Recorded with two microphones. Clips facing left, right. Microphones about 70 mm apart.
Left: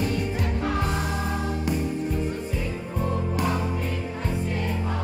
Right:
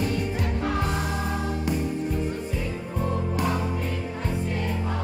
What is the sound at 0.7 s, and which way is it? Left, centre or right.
Music, centre.